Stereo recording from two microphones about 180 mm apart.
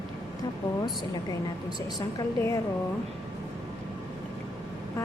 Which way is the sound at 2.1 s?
15° left (ahead or behind).